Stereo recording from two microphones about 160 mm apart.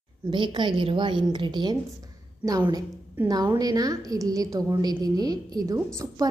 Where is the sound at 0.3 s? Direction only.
30° right (ahead or behind).